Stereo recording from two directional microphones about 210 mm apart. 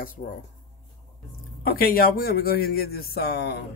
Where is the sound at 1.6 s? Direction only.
45° left (ahead or behind).